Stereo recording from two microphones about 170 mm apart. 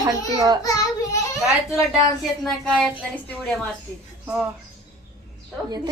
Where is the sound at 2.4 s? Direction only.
5° left (ahead or behind).